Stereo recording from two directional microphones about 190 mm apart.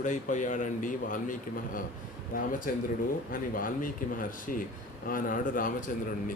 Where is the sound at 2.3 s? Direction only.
45° left (ahead or behind).